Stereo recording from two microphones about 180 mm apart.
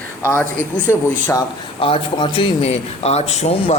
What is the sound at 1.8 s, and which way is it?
Speech, 30° left (ahead or behind).